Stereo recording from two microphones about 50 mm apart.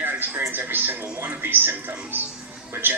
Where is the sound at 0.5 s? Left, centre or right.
Right.